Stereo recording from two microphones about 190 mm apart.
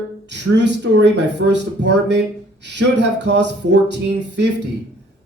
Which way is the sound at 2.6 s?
65° right (ahead or behind).